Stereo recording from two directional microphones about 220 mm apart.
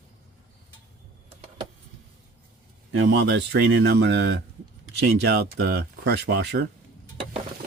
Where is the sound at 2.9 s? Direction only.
55° right (ahead or behind).